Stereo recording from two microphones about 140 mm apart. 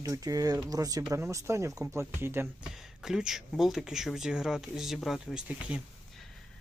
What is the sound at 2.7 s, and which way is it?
Speech, 5° right (ahead or behind).